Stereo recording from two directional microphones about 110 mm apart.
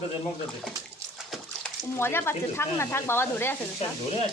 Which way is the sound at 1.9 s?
20° left (ahead or behind).